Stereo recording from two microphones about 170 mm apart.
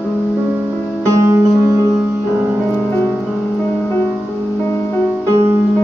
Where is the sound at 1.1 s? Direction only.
15° right (ahead or behind).